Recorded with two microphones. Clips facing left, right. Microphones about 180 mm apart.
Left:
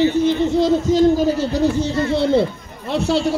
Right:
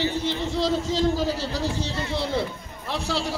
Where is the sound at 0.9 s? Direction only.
50° left (ahead or behind).